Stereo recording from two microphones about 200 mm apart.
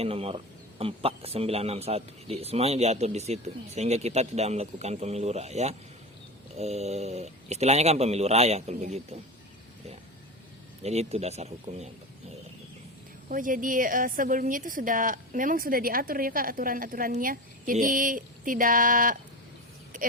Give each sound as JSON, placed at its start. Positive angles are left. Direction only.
{"t": 0.0, "sound": "speech", "side_deg": -30}
{"t": 10.8, "sound": "speech", "side_deg": -30}
{"t": 13.2, "sound": "a woman's voice", "side_deg": -40}
{"t": 19.9, "sound": "a sound", "side_deg": -40}